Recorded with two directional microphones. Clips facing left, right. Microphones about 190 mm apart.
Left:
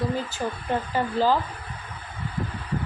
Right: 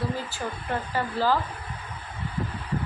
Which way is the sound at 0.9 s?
15° left (ahead or behind).